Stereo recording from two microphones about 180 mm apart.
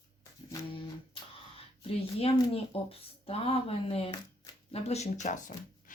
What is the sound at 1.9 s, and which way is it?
Speech, 35° left (ahead or behind).